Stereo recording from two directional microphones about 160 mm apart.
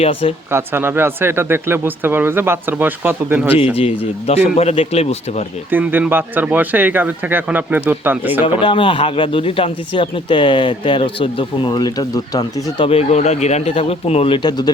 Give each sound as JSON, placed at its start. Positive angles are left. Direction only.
{"t": 0.0, "sound": "speech", "side_deg": 35}
{"t": 0.5, "sound": "speech", "side_deg": -15}
{"t": 3.8, "sound": "speech", "side_deg": 40}
{"t": 5.7, "sound": "speech", "side_deg": -10}
{"t": 8.6, "sound": "speech", "side_deg": 35}